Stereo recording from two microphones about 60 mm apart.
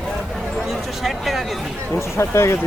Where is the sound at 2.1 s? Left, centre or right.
Left.